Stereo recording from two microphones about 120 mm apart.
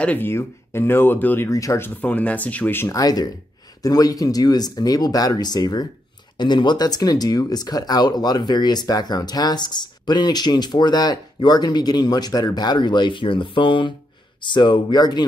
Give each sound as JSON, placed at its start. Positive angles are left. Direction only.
{"t": 0.0, "sound": "speech", "side_deg": 15}
{"t": 2.0, "sound": "speech", "side_deg": 10}
{"t": 2.9, "sound": "speech", "side_deg": 30}